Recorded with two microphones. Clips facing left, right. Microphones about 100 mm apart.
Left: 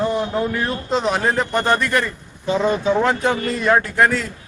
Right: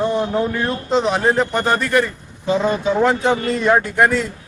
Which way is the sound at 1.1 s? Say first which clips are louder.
Right 3 dB; 25° right (ahead or behind).